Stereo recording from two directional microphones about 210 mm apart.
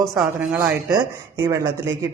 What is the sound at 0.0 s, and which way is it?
Speech, centre (ahead or behind).